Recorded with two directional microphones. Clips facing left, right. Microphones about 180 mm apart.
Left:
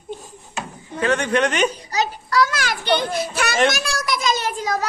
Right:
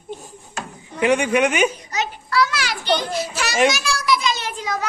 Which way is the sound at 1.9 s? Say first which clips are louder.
Left 3 dB; 40° left (ahead or behind).